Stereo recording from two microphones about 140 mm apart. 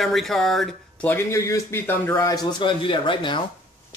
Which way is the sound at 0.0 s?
Centre (ahead or behind).